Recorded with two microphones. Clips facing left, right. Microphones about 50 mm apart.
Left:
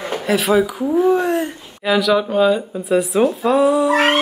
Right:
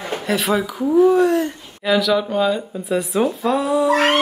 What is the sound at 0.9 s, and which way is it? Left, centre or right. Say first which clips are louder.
Speech: right 4 dB; left.